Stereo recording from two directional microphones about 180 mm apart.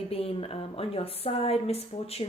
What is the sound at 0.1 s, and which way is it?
Speech, 30° left (ahead or behind).